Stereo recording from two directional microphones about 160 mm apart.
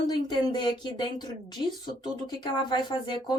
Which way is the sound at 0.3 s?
25° left (ahead or behind).